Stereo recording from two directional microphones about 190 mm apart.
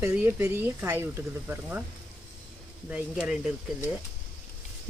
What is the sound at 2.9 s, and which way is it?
Speech, 5° right (ahead or behind).